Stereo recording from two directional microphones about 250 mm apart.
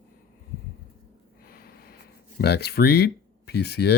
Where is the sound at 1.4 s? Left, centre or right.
Left.